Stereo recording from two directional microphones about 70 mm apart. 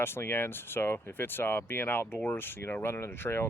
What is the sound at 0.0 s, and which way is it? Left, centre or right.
Speech, left.